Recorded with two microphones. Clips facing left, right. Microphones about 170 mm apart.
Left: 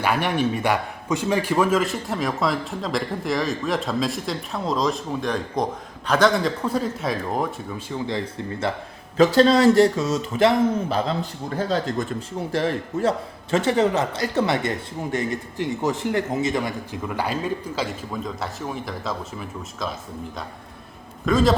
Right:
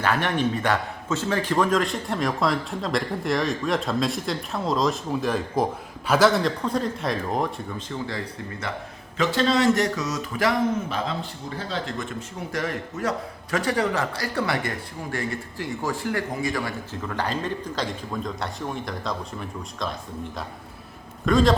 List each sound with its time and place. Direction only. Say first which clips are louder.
0.0 s a man's voice: left 1 dB; 10° left (ahead or behind)
7.9 s a man's voice: left 6 dB; 20° left (ahead or behind)
9.1 s speech: left 6 dB; 35° left (ahead or behind)
11.5 s speech: left 7 dB; 40° left (ahead or behind)
12.5 s a man's voice: left 5 dB; 30° left (ahead or behind); by 19.9 s 5° left (ahead or behind)
21.2 s a man's voice: even; centre (ahead or behind)